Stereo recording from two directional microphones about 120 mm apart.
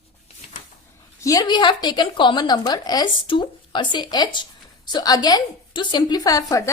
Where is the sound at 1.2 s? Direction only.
35° left (ahead or behind).